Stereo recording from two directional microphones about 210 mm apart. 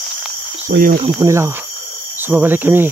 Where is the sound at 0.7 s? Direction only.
45° right (ahead or behind).